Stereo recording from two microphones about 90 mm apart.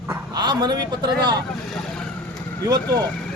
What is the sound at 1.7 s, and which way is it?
Vehicle, 5° left (ahead or behind).